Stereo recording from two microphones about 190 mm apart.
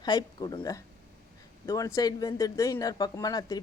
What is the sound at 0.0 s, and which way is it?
Speech, 20° left (ahead or behind).